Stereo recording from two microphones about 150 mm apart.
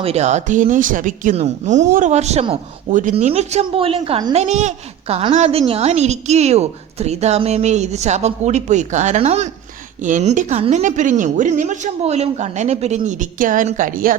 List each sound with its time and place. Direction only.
0.0 s a woman's voice: 45° right (ahead or behind)
2.9 s a woman's voice: 55° right (ahead or behind); by 4.2 s 40° right (ahead or behind)
4.4 s a woman's voice: 50° right (ahead or behind)
13.0 s a woman's voice: 60° right (ahead or behind)